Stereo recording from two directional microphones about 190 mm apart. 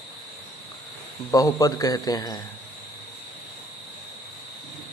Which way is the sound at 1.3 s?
15° left (ahead or behind).